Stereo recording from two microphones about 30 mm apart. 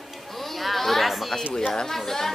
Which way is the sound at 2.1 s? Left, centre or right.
Centre.